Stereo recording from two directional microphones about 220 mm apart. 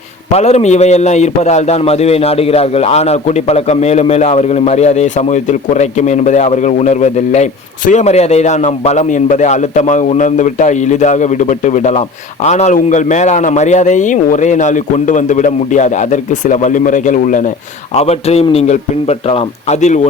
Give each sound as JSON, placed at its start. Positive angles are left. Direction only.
{"t": 0.3, "sound": "a man's voice", "side_deg": 30}